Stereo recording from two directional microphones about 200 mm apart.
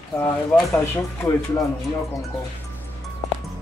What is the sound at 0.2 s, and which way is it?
Speech, 10° left (ahead or behind).